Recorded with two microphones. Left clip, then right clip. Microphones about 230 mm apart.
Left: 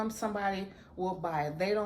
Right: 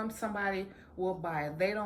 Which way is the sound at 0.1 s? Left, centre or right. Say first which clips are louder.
Left 1 dB; centre.